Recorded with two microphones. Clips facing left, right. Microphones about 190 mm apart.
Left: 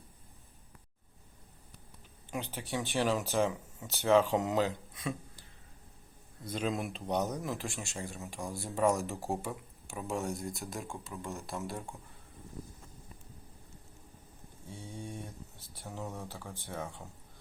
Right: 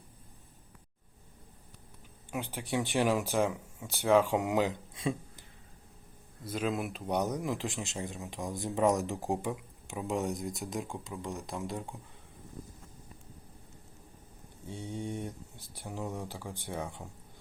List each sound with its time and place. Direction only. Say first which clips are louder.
2.3 s speech: right 3 dB; 10° right (ahead or behind)
4.9 s a sound: right 4 dB; 25° right (ahead or behind)
6.4 s speech: right 1 dB; 5° right (ahead or behind)
14.7 s speech: right 6 dB; 20° right (ahead or behind)